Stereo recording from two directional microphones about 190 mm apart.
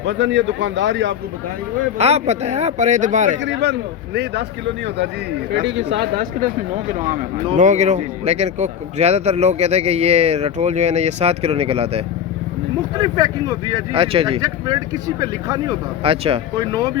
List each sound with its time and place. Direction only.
0.0 s a man's voice: 70° right (ahead or behind)
2.0 s speech: 35° right (ahead or behind)
3.4 s speech: 65° right (ahead or behind)
5.5 s speech: 65° right (ahead or behind)
7.5 s speech: 40° right (ahead or behind)
13.0 s speech: 20° right (ahead or behind)
16.6 s speech: 20° right (ahead or behind)